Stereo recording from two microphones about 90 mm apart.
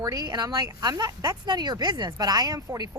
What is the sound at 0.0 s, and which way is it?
Speech, 45° right (ahead or behind).